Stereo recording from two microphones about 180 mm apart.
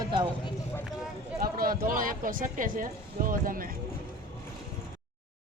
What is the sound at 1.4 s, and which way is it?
Speech, 55° right (ahead or behind).